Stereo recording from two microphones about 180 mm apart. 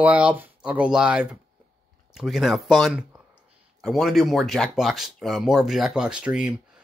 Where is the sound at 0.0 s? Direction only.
5° right (ahead or behind).